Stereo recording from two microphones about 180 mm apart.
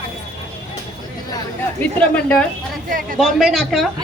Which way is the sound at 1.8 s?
10° left (ahead or behind).